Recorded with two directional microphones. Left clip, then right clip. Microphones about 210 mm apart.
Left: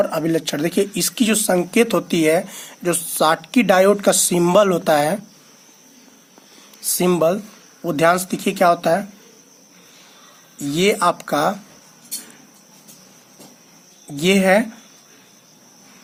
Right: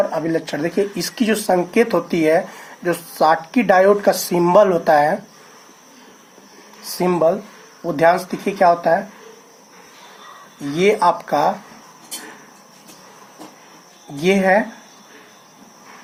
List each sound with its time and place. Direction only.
0.1 s speech: 50° left (ahead or behind); by 5.2 s 30° left (ahead or behind)
7.0 s speech: 45° left (ahead or behind)
10.8 s speech: 35° left (ahead or behind)
14.2 s speech: 40° left (ahead or behind)